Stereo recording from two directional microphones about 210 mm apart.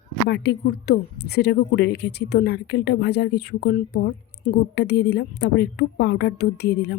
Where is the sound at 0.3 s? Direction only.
55° left (ahead or behind).